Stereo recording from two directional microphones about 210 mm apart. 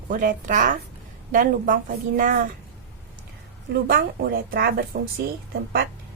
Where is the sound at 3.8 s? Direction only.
45° right (ahead or behind).